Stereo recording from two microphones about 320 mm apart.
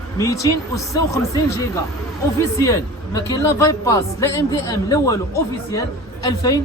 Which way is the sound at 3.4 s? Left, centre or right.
Centre.